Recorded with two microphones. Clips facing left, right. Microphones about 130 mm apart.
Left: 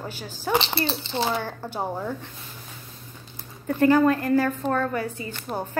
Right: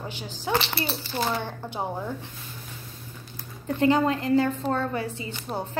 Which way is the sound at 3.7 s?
20° right (ahead or behind).